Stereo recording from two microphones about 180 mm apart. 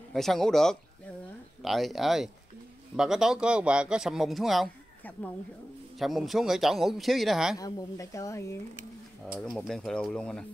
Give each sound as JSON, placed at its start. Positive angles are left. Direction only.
{"t": 0.1, "sound": "a man's voice", "side_deg": 0}
{"t": 7.5, "sound": "a woman's voice", "side_deg": 20}
{"t": 9.4, "sound": "a man's voice", "side_deg": 5}